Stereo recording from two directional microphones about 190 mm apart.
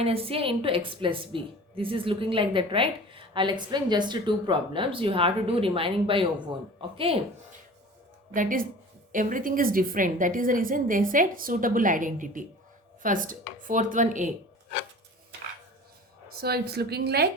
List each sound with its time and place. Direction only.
0.0 s a woman's voice: 30° right (ahead or behind)
8.3 s a woman's voice: 45° right (ahead or behind)
16.4 s a woman's voice: 55° right (ahead or behind)